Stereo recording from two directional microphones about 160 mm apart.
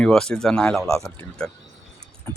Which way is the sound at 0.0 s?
5° left (ahead or behind).